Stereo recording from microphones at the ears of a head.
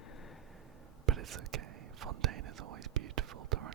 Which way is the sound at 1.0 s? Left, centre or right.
Right.